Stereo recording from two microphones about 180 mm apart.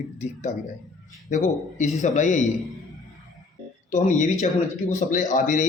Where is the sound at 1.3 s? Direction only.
45° left (ahead or behind).